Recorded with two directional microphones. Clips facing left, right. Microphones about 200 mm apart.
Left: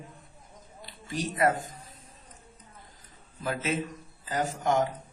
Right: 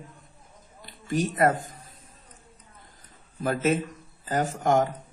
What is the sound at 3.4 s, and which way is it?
Speech, 50° right (ahead or behind).